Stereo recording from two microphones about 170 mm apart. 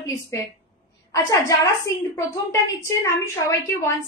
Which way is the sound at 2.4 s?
20° left (ahead or behind).